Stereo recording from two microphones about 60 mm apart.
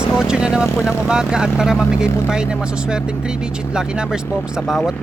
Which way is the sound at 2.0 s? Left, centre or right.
Left.